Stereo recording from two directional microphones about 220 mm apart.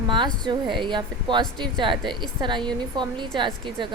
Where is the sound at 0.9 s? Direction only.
20° right (ahead or behind).